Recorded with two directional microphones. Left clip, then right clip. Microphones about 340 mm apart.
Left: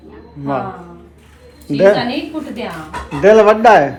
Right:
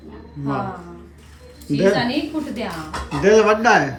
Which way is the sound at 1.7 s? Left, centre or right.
Centre.